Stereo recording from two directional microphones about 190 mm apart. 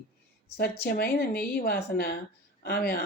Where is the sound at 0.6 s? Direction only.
55° left (ahead or behind).